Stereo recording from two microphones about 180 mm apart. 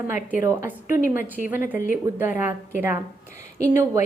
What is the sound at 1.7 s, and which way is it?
Speech, 45° left (ahead or behind).